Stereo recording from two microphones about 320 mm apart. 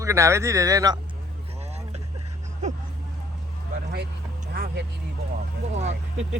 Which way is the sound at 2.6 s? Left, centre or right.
Right.